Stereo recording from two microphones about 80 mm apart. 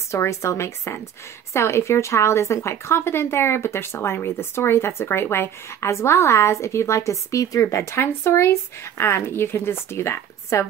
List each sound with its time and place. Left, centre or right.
0.1 s speech: left